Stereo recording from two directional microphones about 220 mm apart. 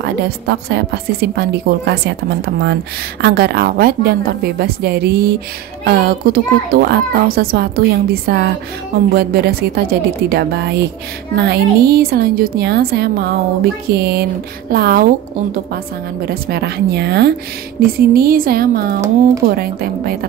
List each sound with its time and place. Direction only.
0.0 s a woman's voice: 50° right (ahead or behind)
16.3 s a woman's voice: 45° right (ahead or behind)